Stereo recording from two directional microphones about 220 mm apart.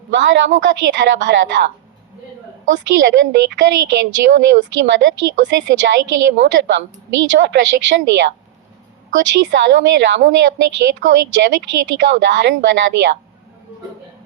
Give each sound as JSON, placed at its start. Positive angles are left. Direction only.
{"t": 0.1, "sound": "a woman's voice", "side_deg": -55}